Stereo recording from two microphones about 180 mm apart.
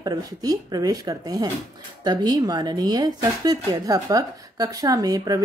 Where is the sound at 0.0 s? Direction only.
20° right (ahead or behind).